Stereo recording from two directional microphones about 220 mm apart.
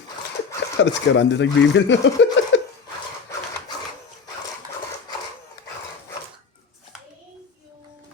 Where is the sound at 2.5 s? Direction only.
55° left (ahead or behind).